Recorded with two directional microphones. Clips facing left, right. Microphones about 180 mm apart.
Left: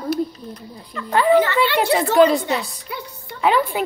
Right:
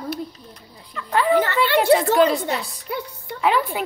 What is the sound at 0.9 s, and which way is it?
A woman's voice, centre (ahead or behind).